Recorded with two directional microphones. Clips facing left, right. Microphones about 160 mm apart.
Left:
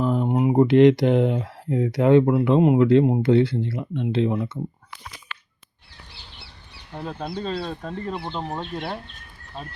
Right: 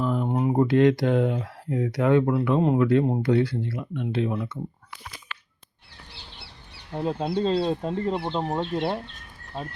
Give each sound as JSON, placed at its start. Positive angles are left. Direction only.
{"t": 0.0, "sound": "speech", "side_deg": 25}
{"t": 7.0, "sound": "speech", "side_deg": -25}